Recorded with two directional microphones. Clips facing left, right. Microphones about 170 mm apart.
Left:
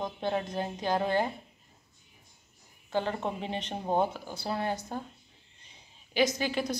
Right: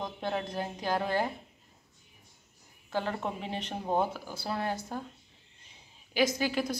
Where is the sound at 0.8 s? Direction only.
20° left (ahead or behind).